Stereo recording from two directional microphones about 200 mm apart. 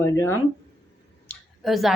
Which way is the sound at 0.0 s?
15° left (ahead or behind).